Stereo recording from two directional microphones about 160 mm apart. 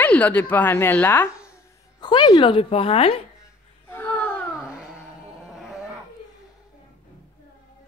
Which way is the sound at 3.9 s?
10° left (ahead or behind).